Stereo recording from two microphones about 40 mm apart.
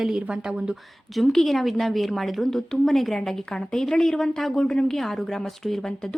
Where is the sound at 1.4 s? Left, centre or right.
Centre.